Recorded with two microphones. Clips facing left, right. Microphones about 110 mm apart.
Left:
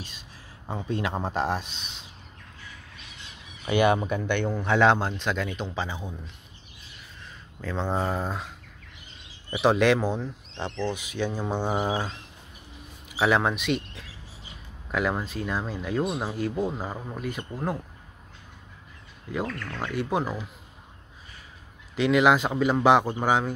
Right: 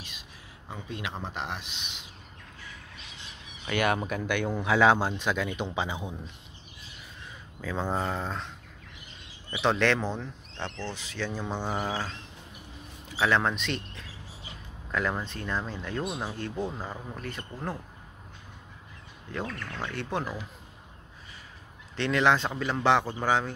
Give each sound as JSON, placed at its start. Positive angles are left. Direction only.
{"t": 0.7, "sound": "speech", "side_deg": 35}
{"t": 3.7, "sound": "speech", "side_deg": 0}
{"t": 7.6, "sound": "speech", "side_deg": -5}
{"t": 8.0, "sound": "speech", "side_deg": 10}
{"t": 19.4, "sound": "speech", "side_deg": -15}
{"t": 19.8, "sound": "speech", "side_deg": 10}
{"t": 21.9, "sound": "speech", "side_deg": 10}